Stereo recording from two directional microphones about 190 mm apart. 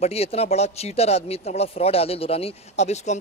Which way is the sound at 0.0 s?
30° left (ahead or behind).